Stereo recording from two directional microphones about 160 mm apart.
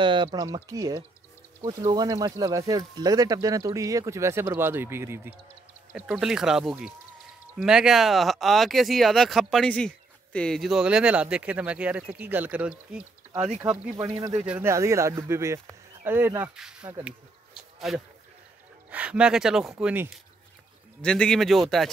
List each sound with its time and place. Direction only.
0.0 s speech: 30° right (ahead or behind); by 5.3 s 15° right (ahead or behind)
5.9 s speech: 5° right (ahead or behind)
13.6 s speech: 25° right (ahead or behind)
14.4 s speech: 10° right (ahead or behind)
17.6 s a sound: centre (ahead or behind)
18.9 s speech: 10° right (ahead or behind)
21.0 s speech: 5° left (ahead or behind)